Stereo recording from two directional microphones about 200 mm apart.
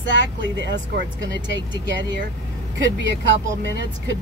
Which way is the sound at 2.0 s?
65° right (ahead or behind).